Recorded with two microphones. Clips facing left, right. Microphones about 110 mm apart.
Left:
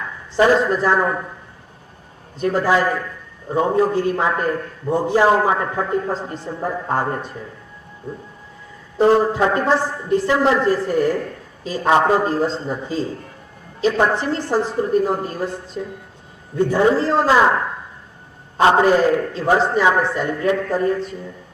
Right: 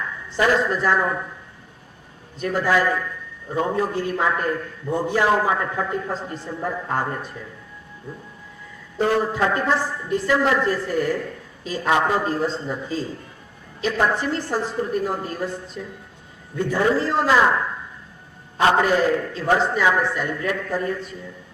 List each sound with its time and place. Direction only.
0.3 s a woman's voice: 25° left (ahead or behind)
2.4 s a man's voice: 35° left (ahead or behind)
9.0 s a woman's voice: 30° left (ahead or behind)